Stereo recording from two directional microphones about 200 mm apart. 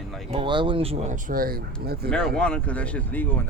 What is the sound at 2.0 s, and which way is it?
Speech, 5° left (ahead or behind).